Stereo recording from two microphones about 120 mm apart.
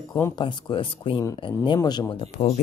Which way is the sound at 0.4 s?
45° left (ahead or behind).